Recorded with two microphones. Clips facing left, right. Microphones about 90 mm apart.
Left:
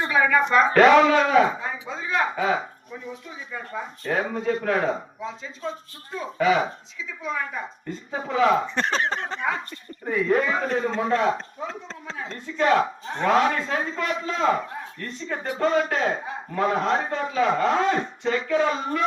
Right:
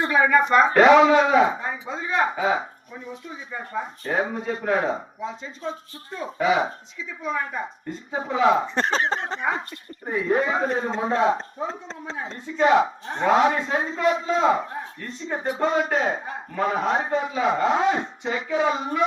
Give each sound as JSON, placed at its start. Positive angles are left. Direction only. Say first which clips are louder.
{"t": 0.1, "sound": "a man's voice", "louder": "right 1 dB", "side_deg": -15}
{"t": 6.4, "sound": "a man's voice", "louder": "even", "side_deg": -15}
{"t": 8.6, "sound": "a man's voice", "louder": "right 1 dB", "side_deg": -30}